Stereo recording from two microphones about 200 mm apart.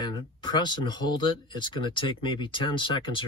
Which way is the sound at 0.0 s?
20° left (ahead or behind).